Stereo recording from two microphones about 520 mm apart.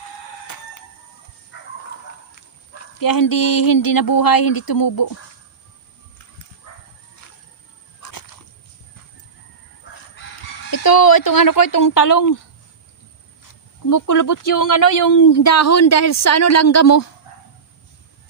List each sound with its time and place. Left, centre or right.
0.4 s chicken: left
1.5 s dog: left
3.0 s speech: left
8.0 s a sound: left
10.7 s speech: left
13.9 s speech: left